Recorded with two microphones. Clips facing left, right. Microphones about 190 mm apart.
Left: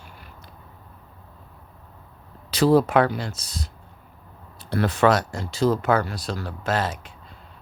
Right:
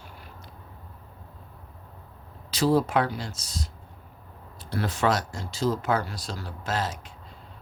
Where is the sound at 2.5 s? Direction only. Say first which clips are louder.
Left 5 dB; 65° left (ahead or behind).